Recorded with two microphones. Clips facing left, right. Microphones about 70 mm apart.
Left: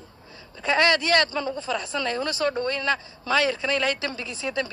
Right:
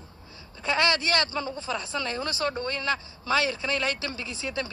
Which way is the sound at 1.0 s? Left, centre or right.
Left.